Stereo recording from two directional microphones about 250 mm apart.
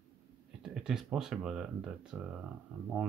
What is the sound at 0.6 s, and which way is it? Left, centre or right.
Speech, centre.